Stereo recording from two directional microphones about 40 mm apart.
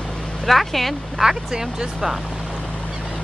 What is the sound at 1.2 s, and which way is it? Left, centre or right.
Speech, centre.